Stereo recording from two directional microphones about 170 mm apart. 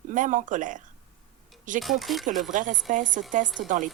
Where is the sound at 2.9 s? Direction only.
50° right (ahead or behind).